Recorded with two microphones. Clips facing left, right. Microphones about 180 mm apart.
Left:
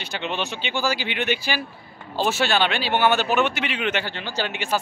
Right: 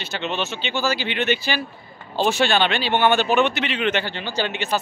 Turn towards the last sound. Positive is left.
turn(degrees=10)  # may be behind; listen again after turning